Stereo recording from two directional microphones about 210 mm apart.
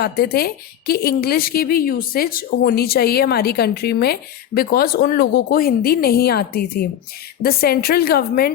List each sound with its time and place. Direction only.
0.0 s speech: 50° left (ahead or behind)